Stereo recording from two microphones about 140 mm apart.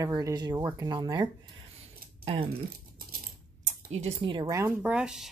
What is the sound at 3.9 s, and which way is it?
Speech, 50° right (ahead or behind).